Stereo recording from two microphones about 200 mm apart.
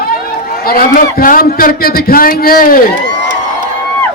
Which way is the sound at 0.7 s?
45° left (ahead or behind).